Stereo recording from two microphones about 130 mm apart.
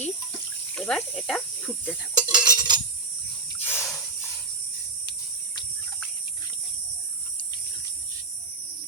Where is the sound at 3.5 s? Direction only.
15° left (ahead or behind).